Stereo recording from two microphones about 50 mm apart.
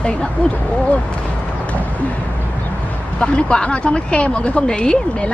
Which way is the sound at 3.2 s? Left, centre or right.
Left.